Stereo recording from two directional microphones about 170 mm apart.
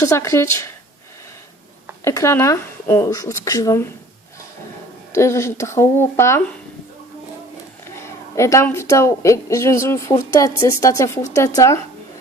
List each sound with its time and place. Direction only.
0.0 s a woman's voice: 15° left (ahead or behind)
2.0 s a woman's voice: 15° left (ahead or behind)
5.1 s a woman's voice: 15° left (ahead or behind)
7.9 s a woman's voice: 15° left (ahead or behind)